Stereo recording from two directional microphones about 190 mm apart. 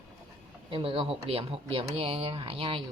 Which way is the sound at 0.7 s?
30° right (ahead or behind).